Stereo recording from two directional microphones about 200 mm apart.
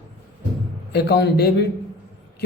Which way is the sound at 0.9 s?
55° left (ahead or behind).